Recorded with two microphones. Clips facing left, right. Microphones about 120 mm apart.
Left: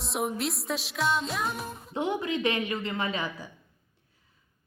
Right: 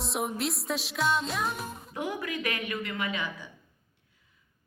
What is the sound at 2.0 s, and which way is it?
Speech, 25° left (ahead or behind).